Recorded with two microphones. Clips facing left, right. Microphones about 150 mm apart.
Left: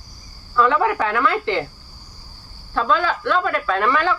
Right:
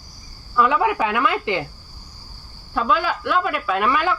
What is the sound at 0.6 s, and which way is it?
Speech, 10° right (ahead or behind).